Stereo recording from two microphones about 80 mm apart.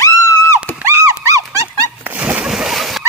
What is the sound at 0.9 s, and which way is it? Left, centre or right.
Dog, right.